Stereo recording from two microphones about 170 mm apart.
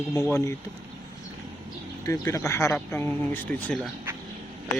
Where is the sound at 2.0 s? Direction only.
20° left (ahead or behind).